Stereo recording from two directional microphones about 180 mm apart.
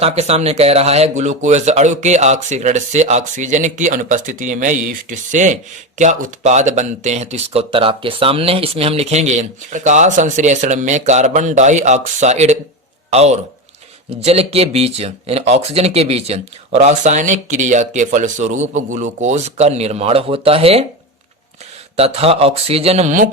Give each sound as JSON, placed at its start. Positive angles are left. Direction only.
{"t": 0.0, "sound": "a man's voice", "side_deg": -35}
{"t": 21.9, "sound": "speech", "side_deg": -35}